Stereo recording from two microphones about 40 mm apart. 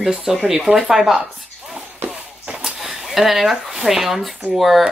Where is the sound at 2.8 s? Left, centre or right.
Centre.